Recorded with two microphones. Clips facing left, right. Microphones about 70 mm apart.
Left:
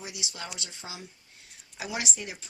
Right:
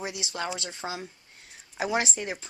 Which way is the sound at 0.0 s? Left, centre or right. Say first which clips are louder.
Right 6 dB; right.